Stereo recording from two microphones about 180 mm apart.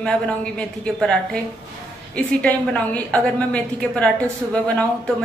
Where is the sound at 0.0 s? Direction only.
5° left (ahead or behind).